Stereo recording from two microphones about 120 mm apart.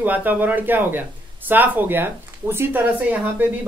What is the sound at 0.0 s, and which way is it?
Speech, 15° right (ahead or behind).